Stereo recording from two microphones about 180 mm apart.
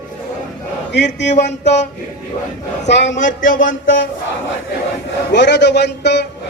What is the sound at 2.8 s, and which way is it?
Speech, 75° left (ahead or behind).